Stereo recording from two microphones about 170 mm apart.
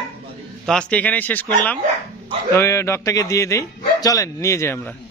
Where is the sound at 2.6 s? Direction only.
15° left (ahead or behind).